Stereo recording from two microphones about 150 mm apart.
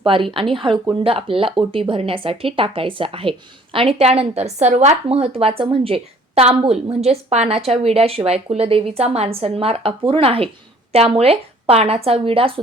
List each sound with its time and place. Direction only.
0.0 s a woman's voice: 35° right (ahead or behind)